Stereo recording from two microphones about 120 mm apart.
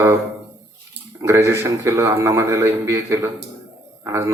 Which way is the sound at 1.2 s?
20° right (ahead or behind).